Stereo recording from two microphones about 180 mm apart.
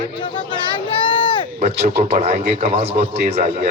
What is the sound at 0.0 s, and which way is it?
Speech, 30° left (ahead or behind).